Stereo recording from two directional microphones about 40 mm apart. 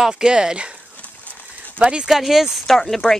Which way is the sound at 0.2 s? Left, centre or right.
Centre.